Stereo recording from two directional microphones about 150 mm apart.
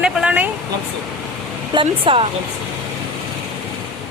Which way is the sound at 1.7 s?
35° right (ahead or behind).